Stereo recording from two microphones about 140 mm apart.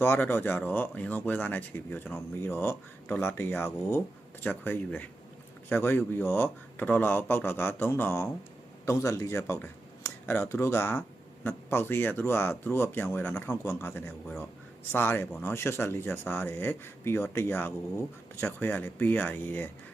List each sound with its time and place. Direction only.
0.0 s a man's voice: 15° left (ahead or behind)